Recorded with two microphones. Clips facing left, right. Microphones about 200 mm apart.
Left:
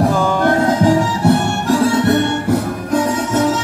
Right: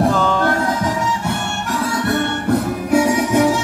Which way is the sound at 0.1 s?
10° left (ahead or behind).